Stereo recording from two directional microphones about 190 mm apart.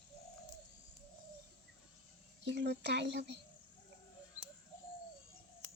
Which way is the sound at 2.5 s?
65° right (ahead or behind).